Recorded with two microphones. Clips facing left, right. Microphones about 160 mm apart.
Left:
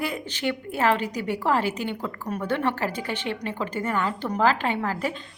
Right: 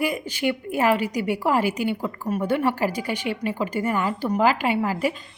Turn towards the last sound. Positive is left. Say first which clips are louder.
# right 4 dB
turn(degrees=-10)  # may be behind; listen again after turning